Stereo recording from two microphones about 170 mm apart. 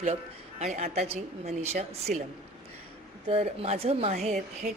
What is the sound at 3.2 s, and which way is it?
A woman's voice, 35° right (ahead or behind).